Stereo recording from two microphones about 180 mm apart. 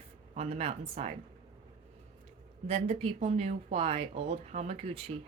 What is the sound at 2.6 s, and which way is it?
Speech, 35° right (ahead or behind).